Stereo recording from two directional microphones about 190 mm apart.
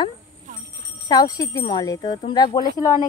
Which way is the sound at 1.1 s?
20° left (ahead or behind).